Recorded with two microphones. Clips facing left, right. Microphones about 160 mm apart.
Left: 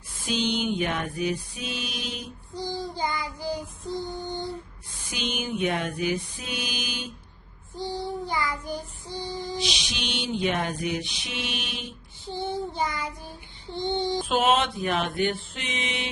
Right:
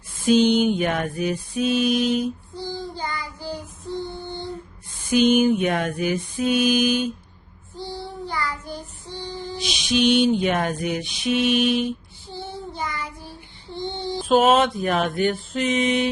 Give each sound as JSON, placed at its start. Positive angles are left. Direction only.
{"t": 0.3, "sound": "mantra", "side_deg": -50}
{"t": 2.6, "sound": "child singing", "side_deg": 15}
{"t": 5.1, "sound": "mantra", "side_deg": -50}
{"t": 7.8, "sound": "child singing", "side_deg": 15}
{"t": 9.9, "sound": "mantra", "side_deg": -50}
{"t": 12.2, "sound": "child singing", "side_deg": 20}
{"t": 14.3, "sound": "mantra", "side_deg": -45}